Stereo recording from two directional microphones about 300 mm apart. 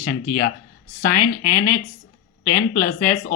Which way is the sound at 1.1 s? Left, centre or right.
Left.